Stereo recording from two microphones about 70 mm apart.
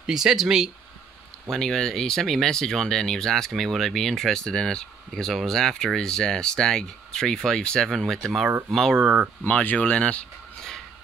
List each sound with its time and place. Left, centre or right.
0.0 s speech: centre
1.5 s speech: centre
9.4 s speech: left